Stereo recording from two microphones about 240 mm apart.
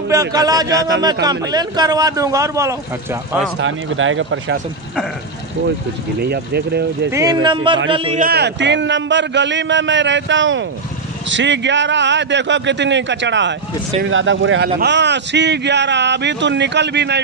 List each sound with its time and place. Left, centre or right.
0.1 s speech: centre
3.5 s a man's voice: right
6.2 s a man's voice: right
7.1 s a man's voice: centre
8.2 s a man's voice: right